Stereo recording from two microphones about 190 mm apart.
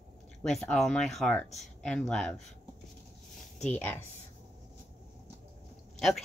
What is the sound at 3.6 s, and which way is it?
Speech, 10° left (ahead or behind).